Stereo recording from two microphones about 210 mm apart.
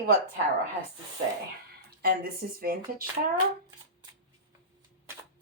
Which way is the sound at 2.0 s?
45° right (ahead or behind).